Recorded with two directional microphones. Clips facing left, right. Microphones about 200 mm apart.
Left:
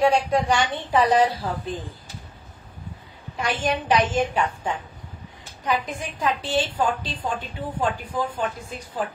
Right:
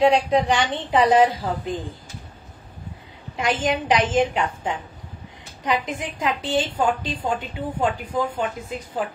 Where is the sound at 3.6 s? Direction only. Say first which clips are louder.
Left 1 dB; 20° right (ahead or behind).